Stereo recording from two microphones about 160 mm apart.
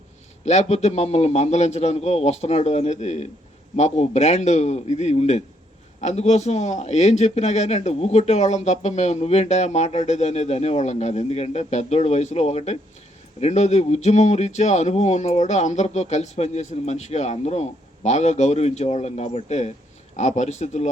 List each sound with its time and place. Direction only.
0.4 s a man's voice: 45° left (ahead or behind)